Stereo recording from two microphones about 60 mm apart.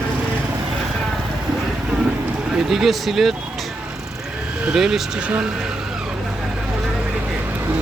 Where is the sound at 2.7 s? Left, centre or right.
Centre.